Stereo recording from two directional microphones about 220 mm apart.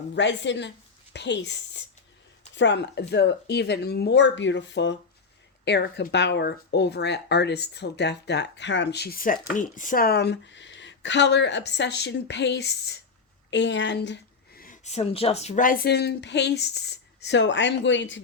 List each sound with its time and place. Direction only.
0.1 s a woman's voice: 55° left (ahead or behind)